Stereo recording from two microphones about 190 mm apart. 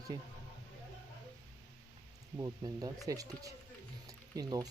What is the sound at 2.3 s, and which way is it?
Speech, 20° right (ahead or behind).